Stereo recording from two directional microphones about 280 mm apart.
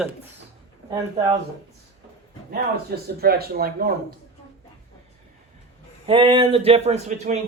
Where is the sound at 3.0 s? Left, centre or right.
Right.